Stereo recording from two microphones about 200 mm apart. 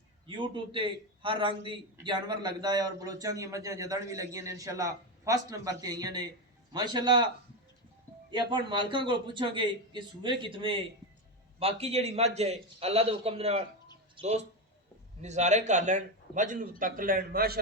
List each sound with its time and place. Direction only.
0.3 s a man's voice: 25° right (ahead or behind)
8.3 s a man's voice: 25° right (ahead or behind); by 17.6 s 50° right (ahead or behind)